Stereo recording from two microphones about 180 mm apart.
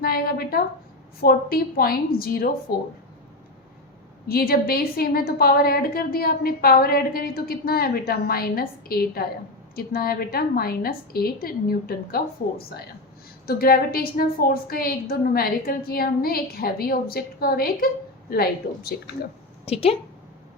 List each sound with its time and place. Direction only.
0.0 s a woman's voice: 55° left (ahead or behind)
4.3 s a woman's voice: 55° left (ahead or behind)
19.6 s a woman's voice: 35° left (ahead or behind)